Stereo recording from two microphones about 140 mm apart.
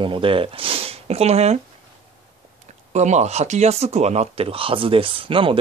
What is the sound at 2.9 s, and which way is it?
Speech, 55° right (ahead or behind).